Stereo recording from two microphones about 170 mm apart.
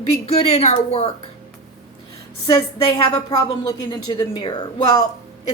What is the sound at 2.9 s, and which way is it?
A woman's voice, 30° left (ahead or behind).